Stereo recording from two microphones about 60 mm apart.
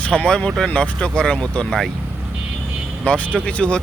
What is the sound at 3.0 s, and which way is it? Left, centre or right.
Speech, left.